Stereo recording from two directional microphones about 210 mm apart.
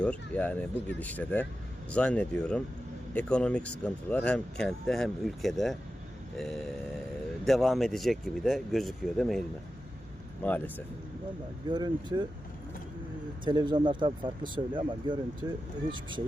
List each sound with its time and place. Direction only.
0.0 s speech: 5° left (ahead or behind)
10.4 s speech: 10° left (ahead or behind)
11.7 s speech: 20° right (ahead or behind)
13.4 s speech: 20° right (ahead or behind)